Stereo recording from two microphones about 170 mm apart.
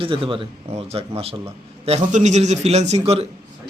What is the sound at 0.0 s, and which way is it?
A man's voice, 30° right (ahead or behind).